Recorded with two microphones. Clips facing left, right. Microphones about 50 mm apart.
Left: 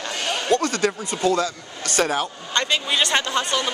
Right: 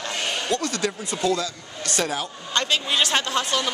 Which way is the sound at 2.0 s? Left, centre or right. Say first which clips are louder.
Left 5 dB; left.